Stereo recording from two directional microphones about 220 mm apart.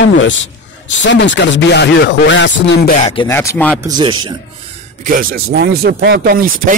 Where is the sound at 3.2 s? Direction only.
15° left (ahead or behind).